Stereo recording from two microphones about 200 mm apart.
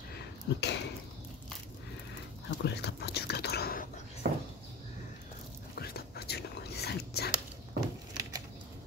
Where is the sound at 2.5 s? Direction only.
55° left (ahead or behind).